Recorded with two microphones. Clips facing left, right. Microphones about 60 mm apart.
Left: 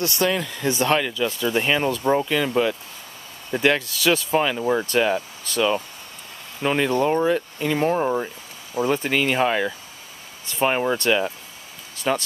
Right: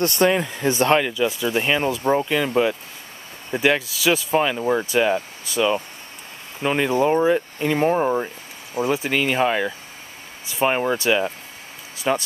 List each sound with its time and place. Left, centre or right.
0.0 s speech: right
0.3 s speech: right; by 12.2 s centre